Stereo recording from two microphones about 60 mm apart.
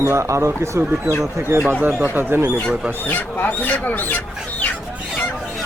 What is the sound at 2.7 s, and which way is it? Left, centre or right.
Speech, right.